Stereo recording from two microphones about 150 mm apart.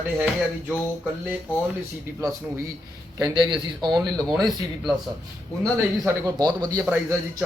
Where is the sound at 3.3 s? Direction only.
30° right (ahead or behind).